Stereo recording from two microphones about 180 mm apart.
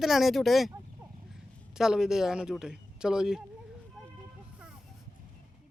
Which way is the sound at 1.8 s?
5° right (ahead or behind).